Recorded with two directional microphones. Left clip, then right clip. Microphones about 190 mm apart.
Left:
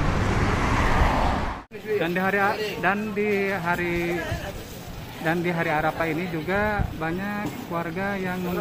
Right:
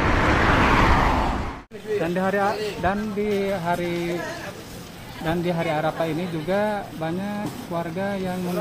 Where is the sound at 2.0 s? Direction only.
30° right (ahead or behind).